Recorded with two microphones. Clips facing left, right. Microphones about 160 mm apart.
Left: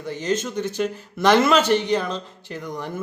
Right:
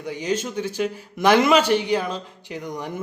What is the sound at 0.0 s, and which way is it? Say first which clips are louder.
A man's voice: left 1 dB; 10° right (ahead or behind).